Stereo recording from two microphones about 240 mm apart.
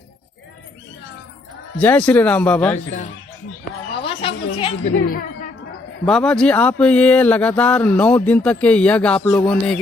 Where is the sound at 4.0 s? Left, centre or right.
Left.